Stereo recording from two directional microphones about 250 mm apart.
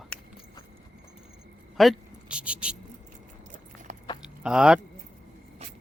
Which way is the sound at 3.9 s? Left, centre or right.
Right.